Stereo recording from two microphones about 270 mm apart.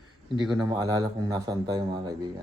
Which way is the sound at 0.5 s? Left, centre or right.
Centre.